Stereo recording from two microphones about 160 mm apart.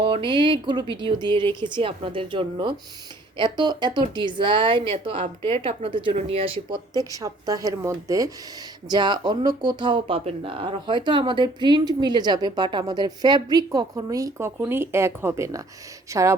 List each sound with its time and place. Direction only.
0.0 s speech: 30° right (ahead or behind)